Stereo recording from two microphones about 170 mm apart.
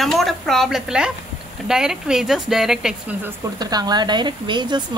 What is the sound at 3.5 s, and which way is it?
Speech, 25° right (ahead or behind).